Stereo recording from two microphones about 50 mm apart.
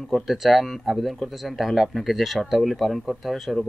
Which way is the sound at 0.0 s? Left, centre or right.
Centre.